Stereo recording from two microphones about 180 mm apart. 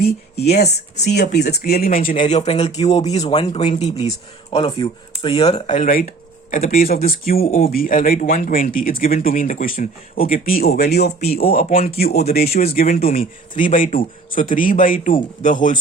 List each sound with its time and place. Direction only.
0.4 s speech: 65° left (ahead or behind); by 15.8 s 45° left (ahead or behind)